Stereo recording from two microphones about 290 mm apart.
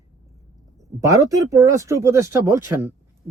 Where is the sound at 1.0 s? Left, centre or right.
Centre.